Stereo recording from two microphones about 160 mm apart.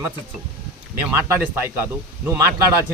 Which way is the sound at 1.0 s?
15° right (ahead or behind).